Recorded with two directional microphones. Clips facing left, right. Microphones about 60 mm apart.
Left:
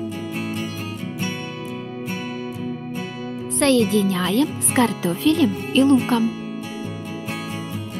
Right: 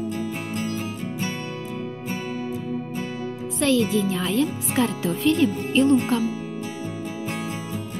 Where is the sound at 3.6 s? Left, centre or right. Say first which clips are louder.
Left 4 dB; left.